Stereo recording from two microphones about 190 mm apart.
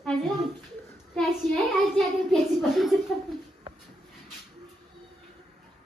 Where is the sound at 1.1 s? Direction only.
Centre (ahead or behind).